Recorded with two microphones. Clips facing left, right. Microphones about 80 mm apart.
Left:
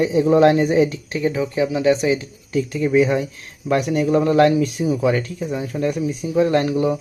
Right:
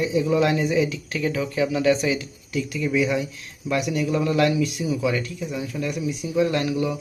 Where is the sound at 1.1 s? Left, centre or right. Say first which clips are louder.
Left 4 dB; left.